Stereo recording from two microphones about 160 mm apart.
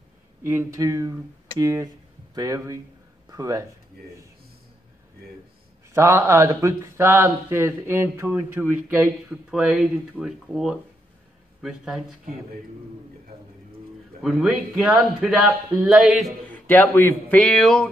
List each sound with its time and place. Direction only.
0.4 s speech: 15° right (ahead or behind)
5.9 s a man's voice: 20° right (ahead or behind); by 12.2 s centre (ahead or behind)
14.2 s a man's voice: centre (ahead or behind)